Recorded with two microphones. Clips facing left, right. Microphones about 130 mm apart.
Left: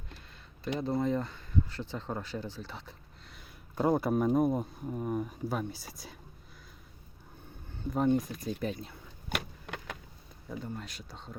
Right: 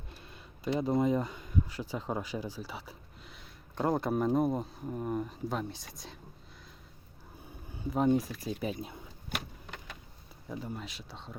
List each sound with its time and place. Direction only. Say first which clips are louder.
0.6 s speech: right 2 dB; 10° right (ahead or behind)
7.4 s speech: even; 10° right (ahead or behind)
9.3 s vehicle: left 3 dB; 85° left
10.5 s speech: even; 5° right (ahead or behind)